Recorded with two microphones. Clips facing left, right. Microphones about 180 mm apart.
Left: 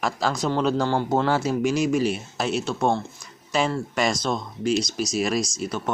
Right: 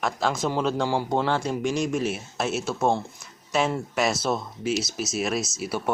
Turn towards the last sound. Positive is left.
turn(degrees=-10)  # may be behind; listen again after turning